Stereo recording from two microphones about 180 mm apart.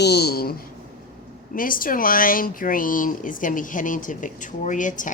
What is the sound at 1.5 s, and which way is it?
Speech, 50° left (ahead or behind).